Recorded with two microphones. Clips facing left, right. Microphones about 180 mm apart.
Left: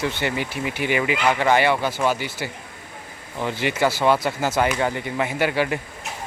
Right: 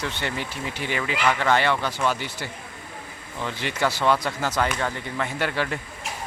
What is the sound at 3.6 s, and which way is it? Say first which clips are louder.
Speech: left 3 dB; 5° left (ahead or behind).